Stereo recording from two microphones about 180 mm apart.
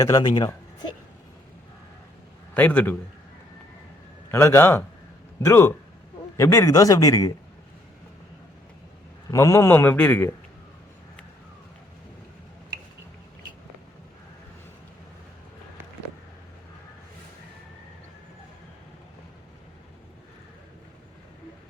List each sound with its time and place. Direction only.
0.0 s speech: 20° left (ahead or behind)
2.6 s a man's voice: 10° left (ahead or behind)
4.3 s a man's voice: 15° left (ahead or behind)
9.3 s a man's voice: 15° left (ahead or behind)